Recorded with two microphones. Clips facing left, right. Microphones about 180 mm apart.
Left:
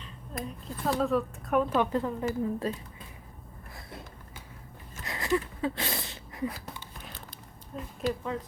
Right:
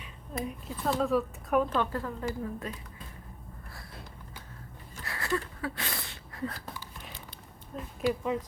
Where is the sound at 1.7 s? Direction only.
15° left (ahead or behind).